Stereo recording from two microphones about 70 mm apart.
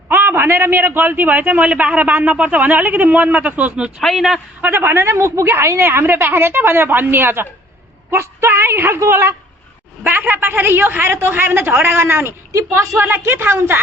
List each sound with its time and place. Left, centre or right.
0.1 s a man's voice: right
4.0 s a man's voice: centre
4.6 s a woman's voice: right
10.0 s a man's voice: right
12.5 s a woman's voice: right